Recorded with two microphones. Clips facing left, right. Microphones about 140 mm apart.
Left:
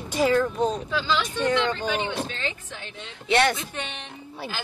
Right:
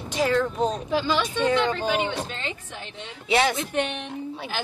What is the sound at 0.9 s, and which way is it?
Speech, 55° right (ahead or behind).